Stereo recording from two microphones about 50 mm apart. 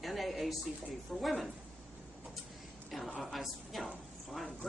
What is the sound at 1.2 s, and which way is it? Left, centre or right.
Speech, centre.